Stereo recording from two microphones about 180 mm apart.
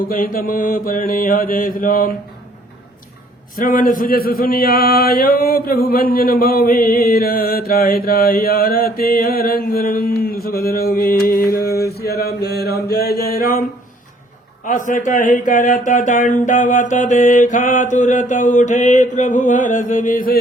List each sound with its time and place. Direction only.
0.1 s speech: 50° left (ahead or behind)
3.6 s speech: 50° left (ahead or behind)
11.5 s mantra: 60° left (ahead or behind)
14.6 s speech: 45° left (ahead or behind)